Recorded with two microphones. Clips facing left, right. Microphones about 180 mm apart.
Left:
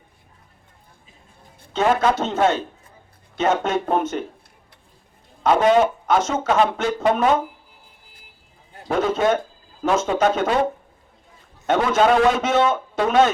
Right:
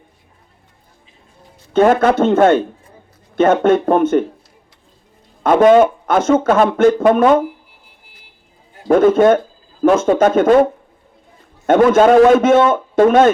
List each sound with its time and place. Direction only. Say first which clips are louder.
1.7 s speech: right 7 dB; 55° right (ahead or behind)
5.4 s speech: right 7 dB; 50° right (ahead or behind)
8.9 s speech: right 9 dB; 50° right (ahead or behind)